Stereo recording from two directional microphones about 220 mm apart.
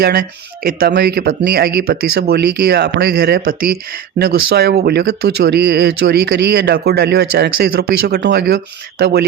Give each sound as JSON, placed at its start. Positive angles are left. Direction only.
{"t": 0.0, "sound": "speech", "side_deg": -45}